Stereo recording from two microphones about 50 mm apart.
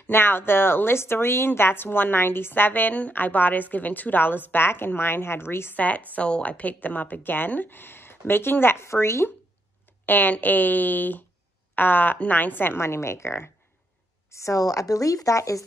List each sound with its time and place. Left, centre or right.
0.1 s speech: left
5.8 s a woman's voice: left
10.0 s a woman's voice: left
12.7 s a woman's voice: left
14.3 s speech: left